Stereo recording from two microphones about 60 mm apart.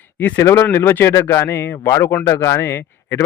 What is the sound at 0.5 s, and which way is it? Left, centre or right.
Speech, left.